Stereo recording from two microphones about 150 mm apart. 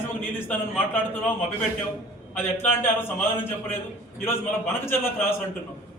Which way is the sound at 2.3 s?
15° left (ahead or behind).